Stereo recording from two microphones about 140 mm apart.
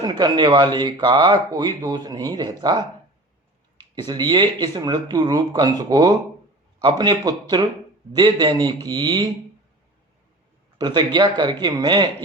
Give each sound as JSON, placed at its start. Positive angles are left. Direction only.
{"t": 0.0, "sound": "speech", "side_deg": -30}
{"t": 3.9, "sound": "speech", "side_deg": -30}
{"t": 10.8, "sound": "speech", "side_deg": -30}